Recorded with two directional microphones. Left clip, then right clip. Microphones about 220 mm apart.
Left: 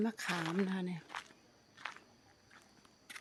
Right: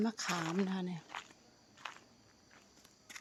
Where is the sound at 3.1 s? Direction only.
5° right (ahead or behind).